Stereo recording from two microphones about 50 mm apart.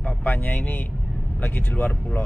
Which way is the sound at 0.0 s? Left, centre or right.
Left.